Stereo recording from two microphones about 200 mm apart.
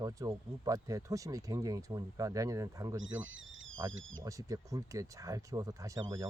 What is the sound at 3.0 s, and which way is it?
Speech, 75° right (ahead or behind).